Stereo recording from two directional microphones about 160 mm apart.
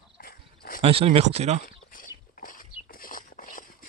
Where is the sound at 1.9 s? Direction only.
60° left (ahead or behind).